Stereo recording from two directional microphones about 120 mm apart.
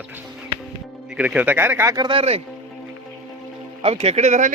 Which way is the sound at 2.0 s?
45° right (ahead or behind).